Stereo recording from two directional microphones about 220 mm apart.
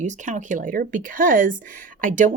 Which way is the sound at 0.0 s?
35° right (ahead or behind).